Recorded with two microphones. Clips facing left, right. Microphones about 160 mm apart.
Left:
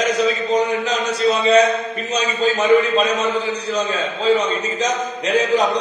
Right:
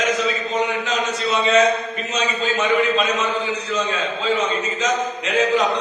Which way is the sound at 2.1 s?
35° left (ahead or behind).